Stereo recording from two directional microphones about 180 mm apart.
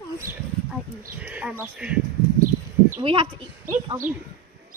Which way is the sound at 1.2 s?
10° right (ahead or behind).